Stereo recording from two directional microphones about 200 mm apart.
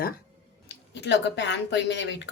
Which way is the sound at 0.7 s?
60° left (ahead or behind).